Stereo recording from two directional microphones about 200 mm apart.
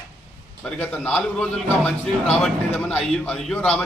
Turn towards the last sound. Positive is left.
turn(degrees=5)  # may be behind; listen again after turning